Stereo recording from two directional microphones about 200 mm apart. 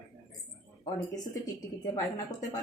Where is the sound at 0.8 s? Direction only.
20° left (ahead or behind).